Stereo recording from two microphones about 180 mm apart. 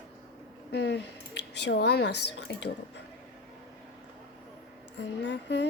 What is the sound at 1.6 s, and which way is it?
Speech, 70° left (ahead or behind).